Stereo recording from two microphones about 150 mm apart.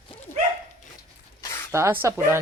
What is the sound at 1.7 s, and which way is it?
Speech, 15° right (ahead or behind).